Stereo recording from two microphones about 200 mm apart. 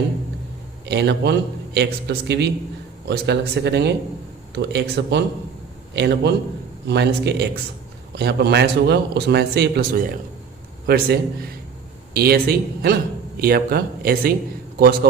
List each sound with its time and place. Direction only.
0.9 s a man's voice: 55° right (ahead or behind)